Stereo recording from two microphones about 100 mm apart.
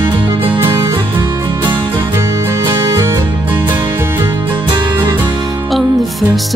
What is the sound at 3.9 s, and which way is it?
Music, 25° right (ahead or behind).